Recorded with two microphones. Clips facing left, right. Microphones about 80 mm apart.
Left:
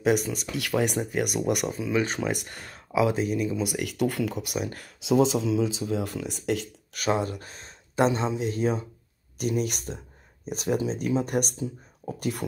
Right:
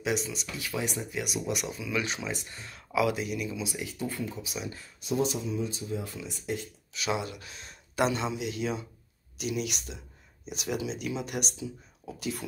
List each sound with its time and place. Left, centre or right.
0.0 s speech: left
0.6 s speech: left
1.8 s speech: left
2.1 s speech: left
2.9 s speech: left
3.6 s speech: left
4.8 s speech: left
7.0 s speech: left